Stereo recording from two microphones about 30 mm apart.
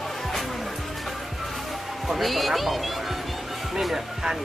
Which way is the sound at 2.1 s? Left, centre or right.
Centre.